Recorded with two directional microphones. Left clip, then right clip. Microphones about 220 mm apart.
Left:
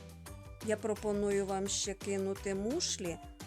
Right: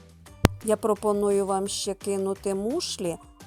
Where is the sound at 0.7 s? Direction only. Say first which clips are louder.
Right 8 dB; 25° right (ahead or behind).